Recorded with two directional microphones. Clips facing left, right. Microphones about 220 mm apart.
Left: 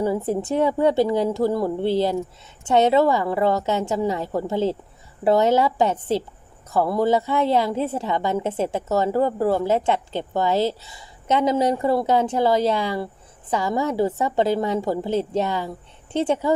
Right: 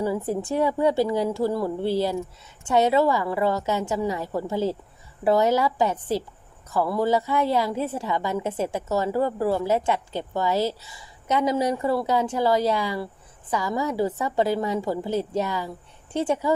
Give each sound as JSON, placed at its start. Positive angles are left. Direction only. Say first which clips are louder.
{"t": 0.0, "sound": "a woman's voice", "louder": "left 3 dB", "side_deg": 25}